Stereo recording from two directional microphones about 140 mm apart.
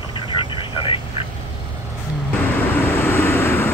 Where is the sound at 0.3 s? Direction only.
35° left (ahead or behind).